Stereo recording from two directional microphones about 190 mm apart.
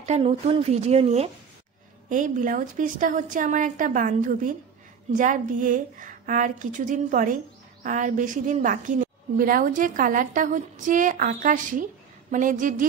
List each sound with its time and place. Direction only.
0.0 s a woman's voice: 35° right (ahead or behind)